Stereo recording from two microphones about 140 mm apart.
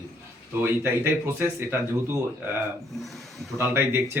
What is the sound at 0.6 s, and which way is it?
Speech, 15° right (ahead or behind).